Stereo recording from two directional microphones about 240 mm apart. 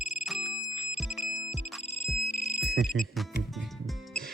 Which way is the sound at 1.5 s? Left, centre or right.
Left.